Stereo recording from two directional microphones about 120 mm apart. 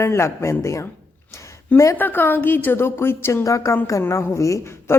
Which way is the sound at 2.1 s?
15° left (ahead or behind).